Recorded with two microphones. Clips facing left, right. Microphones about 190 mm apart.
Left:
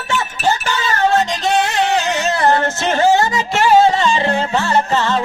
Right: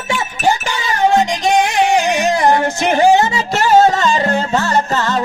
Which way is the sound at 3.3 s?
40° right (ahead or behind).